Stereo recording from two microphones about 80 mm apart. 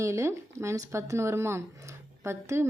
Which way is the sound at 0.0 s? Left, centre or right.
Right.